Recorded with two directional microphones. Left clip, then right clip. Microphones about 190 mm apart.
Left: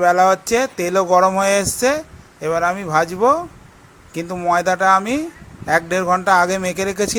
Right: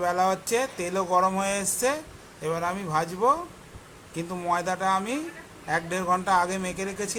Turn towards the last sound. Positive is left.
turn(degrees=45)  # may be behind; listen again after turning